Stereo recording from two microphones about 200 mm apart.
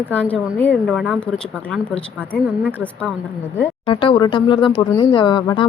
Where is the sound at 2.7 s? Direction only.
5° left (ahead or behind).